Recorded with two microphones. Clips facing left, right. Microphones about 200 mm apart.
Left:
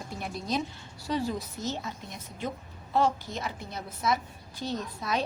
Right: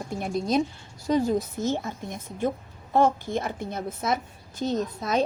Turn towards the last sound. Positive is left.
turn(degrees=-45)  # may be behind; listen again after turning